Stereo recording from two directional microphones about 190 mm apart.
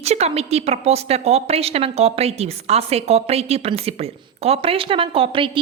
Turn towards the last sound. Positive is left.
turn(degrees=-30)  # may be behind; listen again after turning